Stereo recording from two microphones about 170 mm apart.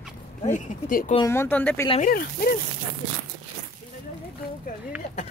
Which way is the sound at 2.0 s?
60° left (ahead or behind).